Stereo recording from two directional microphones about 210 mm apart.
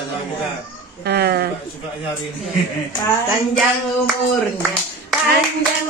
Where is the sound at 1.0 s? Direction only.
50° right (ahead or behind).